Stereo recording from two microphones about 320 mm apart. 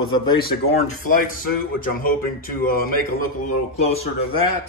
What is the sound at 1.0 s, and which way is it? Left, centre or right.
Speech, left.